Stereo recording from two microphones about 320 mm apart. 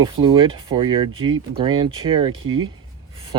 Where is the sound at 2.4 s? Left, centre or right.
Right.